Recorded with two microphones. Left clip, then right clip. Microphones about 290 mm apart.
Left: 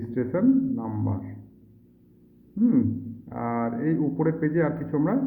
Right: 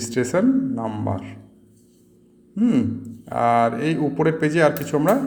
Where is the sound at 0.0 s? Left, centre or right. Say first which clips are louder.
Right 5 dB; right.